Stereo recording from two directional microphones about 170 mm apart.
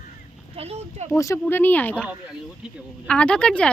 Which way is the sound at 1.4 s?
10° left (ahead or behind).